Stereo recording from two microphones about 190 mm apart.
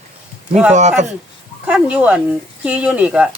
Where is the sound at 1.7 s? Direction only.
5° right (ahead or behind).